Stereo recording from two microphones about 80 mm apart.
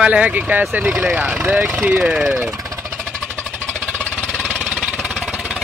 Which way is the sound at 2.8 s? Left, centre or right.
Centre.